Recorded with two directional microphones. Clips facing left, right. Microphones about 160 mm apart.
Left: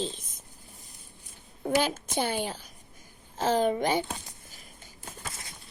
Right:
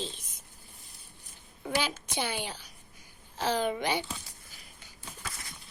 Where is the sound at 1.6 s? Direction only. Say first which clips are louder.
Left 5 dB; 50° left (ahead or behind).